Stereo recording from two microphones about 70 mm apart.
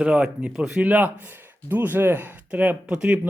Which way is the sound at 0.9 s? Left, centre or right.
Right.